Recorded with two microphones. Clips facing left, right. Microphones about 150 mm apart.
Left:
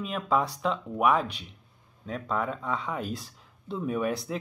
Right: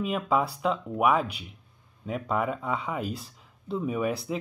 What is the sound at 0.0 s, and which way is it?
Speech, 5° right (ahead or behind).